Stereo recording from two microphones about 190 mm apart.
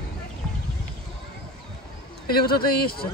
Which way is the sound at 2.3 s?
55° left (ahead or behind).